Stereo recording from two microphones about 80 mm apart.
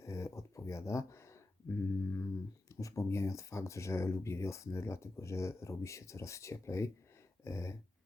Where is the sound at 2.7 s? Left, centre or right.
Left.